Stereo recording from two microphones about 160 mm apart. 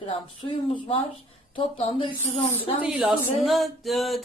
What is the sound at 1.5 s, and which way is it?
Speech, 35° left (ahead or behind).